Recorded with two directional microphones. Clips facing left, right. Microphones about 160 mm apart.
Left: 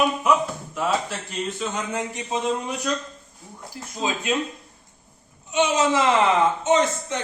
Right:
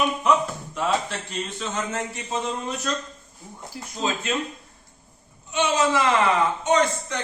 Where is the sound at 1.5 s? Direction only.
15° left (ahead or behind).